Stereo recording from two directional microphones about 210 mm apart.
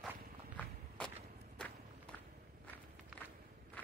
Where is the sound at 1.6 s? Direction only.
5° left (ahead or behind).